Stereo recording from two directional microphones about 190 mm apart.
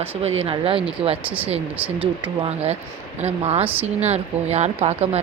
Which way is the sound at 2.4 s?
35° right (ahead or behind).